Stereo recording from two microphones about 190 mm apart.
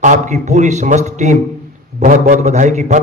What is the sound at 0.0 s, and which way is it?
A man's voice, 40° right (ahead or behind).